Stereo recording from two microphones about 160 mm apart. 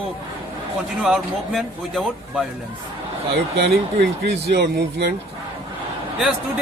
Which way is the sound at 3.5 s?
85° right.